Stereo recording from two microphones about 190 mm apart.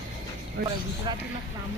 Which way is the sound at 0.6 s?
55° right (ahead or behind).